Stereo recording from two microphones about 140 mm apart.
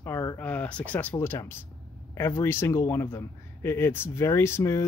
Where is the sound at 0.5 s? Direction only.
10° left (ahead or behind).